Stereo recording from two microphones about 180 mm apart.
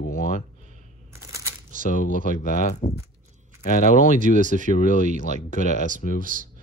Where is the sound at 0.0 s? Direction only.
50° left (ahead or behind).